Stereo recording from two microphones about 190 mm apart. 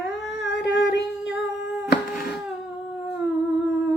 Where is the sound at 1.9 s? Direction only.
55° left (ahead or behind).